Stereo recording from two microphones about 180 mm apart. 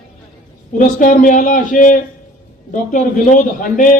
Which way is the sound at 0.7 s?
45° left (ahead or behind).